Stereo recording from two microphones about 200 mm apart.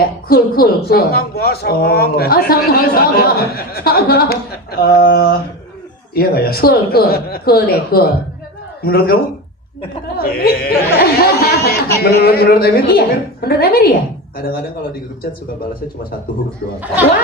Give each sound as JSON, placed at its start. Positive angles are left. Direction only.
{"t": 0.0, "sound": "speech", "side_deg": 50}
{"t": 10.2, "sound": "speech", "side_deg": 50}
{"t": 11.7, "sound": "speech", "side_deg": 15}
{"t": 12.0, "sound": "speech", "side_deg": 50}